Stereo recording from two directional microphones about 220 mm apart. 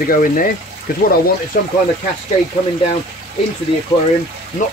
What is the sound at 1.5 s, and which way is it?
Speech, 35° left (ahead or behind).